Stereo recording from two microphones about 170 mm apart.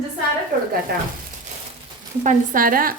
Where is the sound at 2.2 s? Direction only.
50° right (ahead or behind).